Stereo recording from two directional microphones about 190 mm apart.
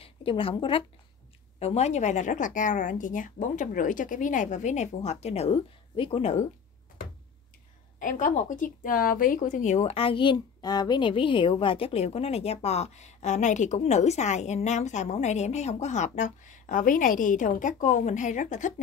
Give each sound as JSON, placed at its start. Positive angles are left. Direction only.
{"t": 0.0, "sound": "speech", "side_deg": 30}
{"t": 8.0, "sound": "speech", "side_deg": 40}